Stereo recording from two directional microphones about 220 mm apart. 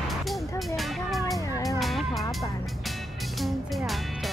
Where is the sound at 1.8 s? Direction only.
Centre (ahead or behind).